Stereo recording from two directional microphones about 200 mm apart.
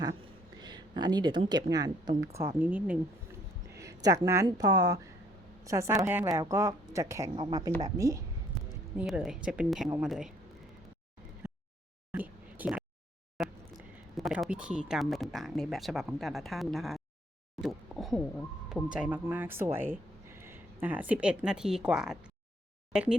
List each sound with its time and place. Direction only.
0.6 s a woman's voice: 20° right (ahead or behind)
9.0 s speech: 5° right (ahead or behind)
11.4 s a sound: 10° right (ahead or behind)
14.2 s a woman's voice: centre (ahead or behind)